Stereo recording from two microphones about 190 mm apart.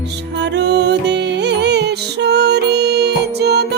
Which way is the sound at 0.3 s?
65° right (ahead or behind).